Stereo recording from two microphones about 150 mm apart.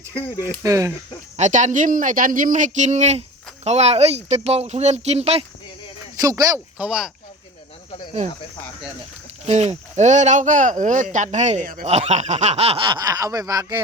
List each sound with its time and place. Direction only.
0.6 s speech: 20° right (ahead or behind)
1.4 s speech: 55° right (ahead or behind)
6.1 s speech: 25° right (ahead or behind)
6.7 s speech: 5° right (ahead or behind)
9.5 s speech: 50° right (ahead or behind)
11.9 s speech: 45° right (ahead or behind); by 13.8 s 25° right (ahead or behind)